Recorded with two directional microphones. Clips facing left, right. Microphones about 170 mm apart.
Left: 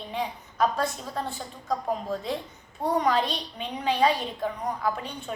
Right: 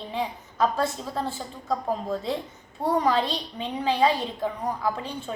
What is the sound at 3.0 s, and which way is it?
A woman's voice, 30° right (ahead or behind).